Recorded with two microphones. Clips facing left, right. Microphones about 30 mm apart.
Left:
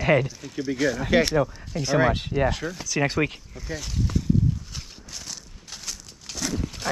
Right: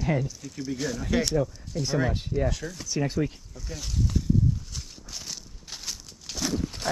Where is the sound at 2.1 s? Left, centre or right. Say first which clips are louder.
Left 4 dB; left.